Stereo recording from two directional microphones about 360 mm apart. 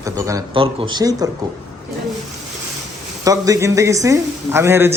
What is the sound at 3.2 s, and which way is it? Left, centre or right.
A man's voice, centre.